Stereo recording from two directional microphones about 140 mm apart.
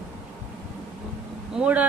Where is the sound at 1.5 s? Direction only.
10° right (ahead or behind).